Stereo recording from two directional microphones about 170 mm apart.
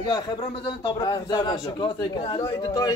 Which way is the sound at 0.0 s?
25° left (ahead or behind).